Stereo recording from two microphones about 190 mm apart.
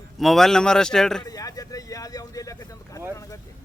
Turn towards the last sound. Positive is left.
turn(degrees=15)  # may be behind; listen again after turning